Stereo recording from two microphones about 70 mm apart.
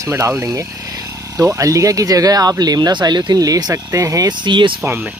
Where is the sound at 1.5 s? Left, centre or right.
Right.